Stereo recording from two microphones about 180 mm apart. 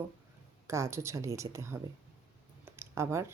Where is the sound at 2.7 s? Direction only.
15° right (ahead or behind).